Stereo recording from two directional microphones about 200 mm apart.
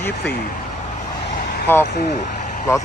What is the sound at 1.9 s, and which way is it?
Speech, 45° left (ahead or behind).